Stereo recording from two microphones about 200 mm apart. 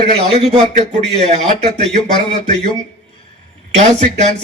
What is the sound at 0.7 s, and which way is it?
Speech, 35° right (ahead or behind).